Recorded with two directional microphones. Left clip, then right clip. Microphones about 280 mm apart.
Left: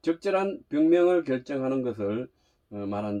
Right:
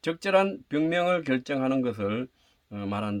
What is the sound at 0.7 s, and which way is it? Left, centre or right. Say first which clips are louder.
Speech: left 7 dB; right.